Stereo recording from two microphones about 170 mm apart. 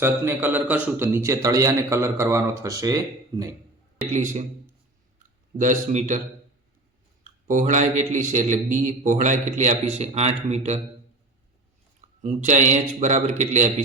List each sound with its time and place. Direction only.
0.0 s a man's voice: 10° right (ahead or behind)
4.1 s a man's voice: 45° right (ahead or behind)
5.5 s a man's voice: 45° right (ahead or behind)
7.4 s a man's voice: 45° right (ahead or behind)
12.2 s a man's voice: 45° right (ahead or behind)